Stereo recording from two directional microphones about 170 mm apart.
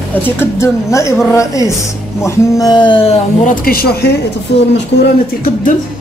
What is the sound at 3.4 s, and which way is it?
Speech, 55° left (ahead or behind).